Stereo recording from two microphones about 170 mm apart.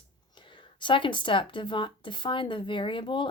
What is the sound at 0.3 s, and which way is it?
Speech, 30° left (ahead or behind).